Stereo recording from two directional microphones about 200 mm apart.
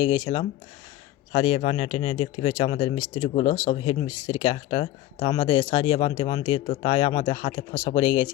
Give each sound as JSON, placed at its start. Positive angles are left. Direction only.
{"t": 0.0, "sound": "speech", "side_deg": 25}